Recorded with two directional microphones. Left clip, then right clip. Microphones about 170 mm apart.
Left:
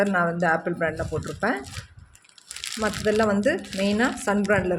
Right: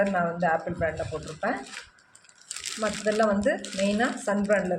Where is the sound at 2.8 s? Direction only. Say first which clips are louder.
Left 2 dB; 65° left (ahead or behind).